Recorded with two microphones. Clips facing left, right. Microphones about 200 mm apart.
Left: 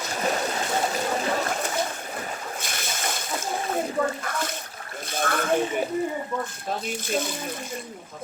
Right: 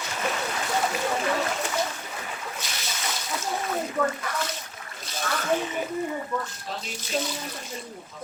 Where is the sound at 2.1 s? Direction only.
50° left (ahead or behind).